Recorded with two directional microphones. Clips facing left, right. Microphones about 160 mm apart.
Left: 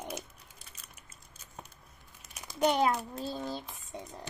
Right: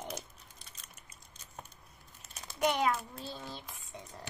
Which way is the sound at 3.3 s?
40° left (ahead or behind).